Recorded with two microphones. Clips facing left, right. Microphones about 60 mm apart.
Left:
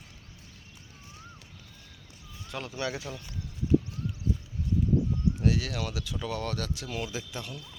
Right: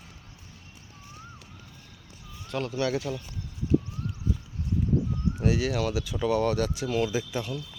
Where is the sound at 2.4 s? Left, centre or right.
Centre.